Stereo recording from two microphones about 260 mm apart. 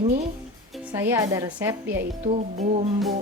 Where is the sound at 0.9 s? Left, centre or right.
Centre.